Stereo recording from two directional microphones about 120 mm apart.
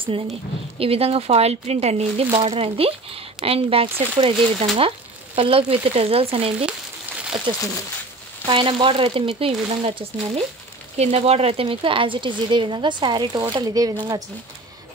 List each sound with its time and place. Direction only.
0.0 s a woman's voice: 50° right (ahead or behind)
2.4 s speech: 55° right (ahead or behind)
8.5 s a woman's voice: 45° right (ahead or behind)